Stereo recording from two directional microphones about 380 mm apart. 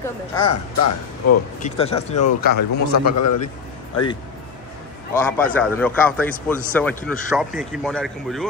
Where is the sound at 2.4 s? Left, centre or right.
Left.